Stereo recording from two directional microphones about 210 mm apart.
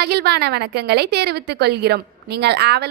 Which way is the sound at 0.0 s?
50° right (ahead or behind).